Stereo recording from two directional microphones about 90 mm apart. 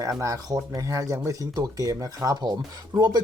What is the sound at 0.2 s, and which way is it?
Speech, 35° right (ahead or behind).